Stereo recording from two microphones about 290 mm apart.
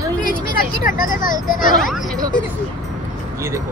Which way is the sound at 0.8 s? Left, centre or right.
Left.